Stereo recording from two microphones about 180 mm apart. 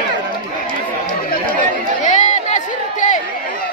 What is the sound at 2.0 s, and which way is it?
Crowd, 40° left (ahead or behind).